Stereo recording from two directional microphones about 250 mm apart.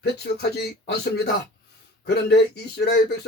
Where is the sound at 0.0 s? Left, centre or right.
Left.